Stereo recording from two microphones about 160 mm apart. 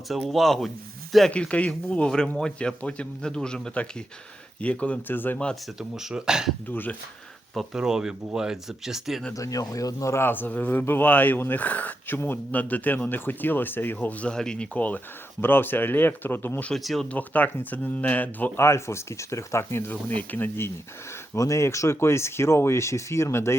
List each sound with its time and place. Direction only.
0.1 s speech: centre (ahead or behind)
5.9 s speech: 5° right (ahead or behind)
6.7 s speech: 10° left (ahead or behind)
7.5 s speech: centre (ahead or behind)
9.3 s speech: 20° left (ahead or behind)